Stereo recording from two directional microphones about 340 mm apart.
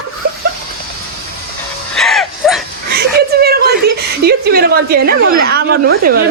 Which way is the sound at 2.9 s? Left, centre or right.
Right.